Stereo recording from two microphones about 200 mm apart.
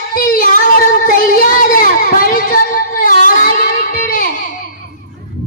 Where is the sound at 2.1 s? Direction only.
45° left (ahead or behind).